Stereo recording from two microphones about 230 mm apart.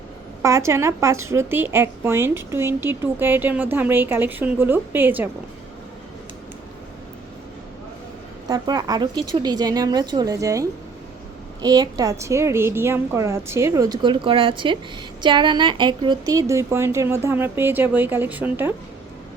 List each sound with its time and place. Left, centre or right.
0.4 s a woman's voice: centre
8.4 s a woman's voice: centre